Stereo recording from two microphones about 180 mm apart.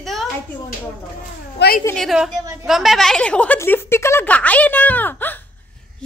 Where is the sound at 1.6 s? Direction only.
70° left (ahead or behind).